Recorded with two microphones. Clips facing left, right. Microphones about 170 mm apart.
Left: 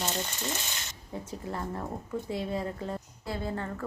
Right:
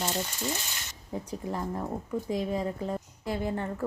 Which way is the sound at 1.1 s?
15° right (ahead or behind).